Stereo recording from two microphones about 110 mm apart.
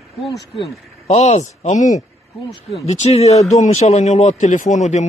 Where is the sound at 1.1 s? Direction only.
80° left.